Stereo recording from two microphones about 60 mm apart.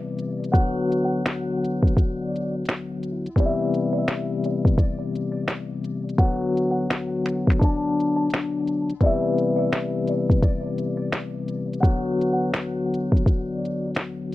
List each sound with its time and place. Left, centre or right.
1.0 s music: centre
3.5 s music: centre
6.7 s music: centre
11.8 s music: centre